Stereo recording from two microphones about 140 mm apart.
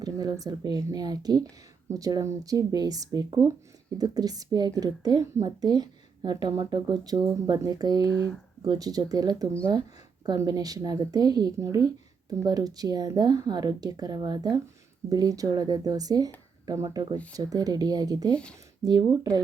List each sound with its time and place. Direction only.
0.0 s speech: 25° right (ahead or behind)